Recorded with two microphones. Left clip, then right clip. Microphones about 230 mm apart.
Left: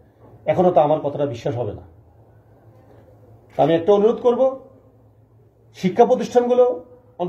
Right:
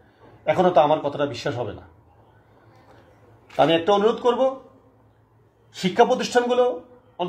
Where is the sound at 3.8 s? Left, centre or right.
Right.